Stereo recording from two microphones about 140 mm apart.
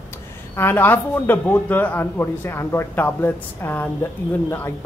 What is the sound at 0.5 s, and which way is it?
A man's voice, 15° left (ahead or behind).